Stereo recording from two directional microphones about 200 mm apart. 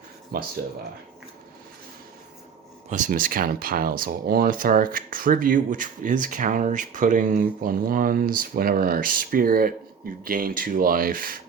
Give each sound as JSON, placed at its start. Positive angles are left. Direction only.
{"t": 0.3, "sound": "speech", "side_deg": -50}
{"t": 2.9, "sound": "speech", "side_deg": -40}